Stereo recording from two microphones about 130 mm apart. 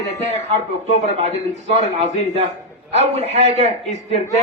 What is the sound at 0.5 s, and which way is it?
Speech, 55° right (ahead or behind).